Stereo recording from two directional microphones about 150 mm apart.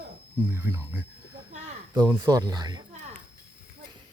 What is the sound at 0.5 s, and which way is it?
Speech, 15° right (ahead or behind).